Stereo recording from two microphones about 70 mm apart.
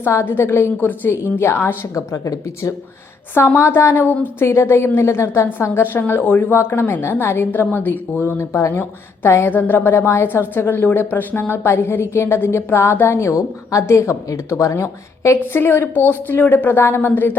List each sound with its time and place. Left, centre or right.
0.0 s a woman's voice: left
2.0 s a woman's voice: left
3.3 s a woman's voice: left
13.3 s a woman's voice: left
13.8 s a woman's voice: left
15.5 s a woman's voice: left